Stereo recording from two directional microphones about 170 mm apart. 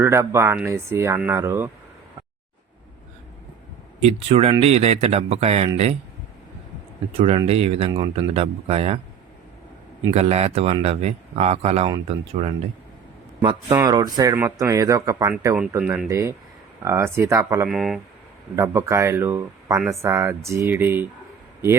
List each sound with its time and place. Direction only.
0.0 s speech: 15° right (ahead or behind)
4.0 s speech: 35° right (ahead or behind)
7.1 s speech: 35° right (ahead or behind)
10.2 s speech: 40° right (ahead or behind); by 17.7 s 15° right (ahead or behind)
17.7 s speech: centre (ahead or behind)
18.5 s speech: 15° right (ahead or behind)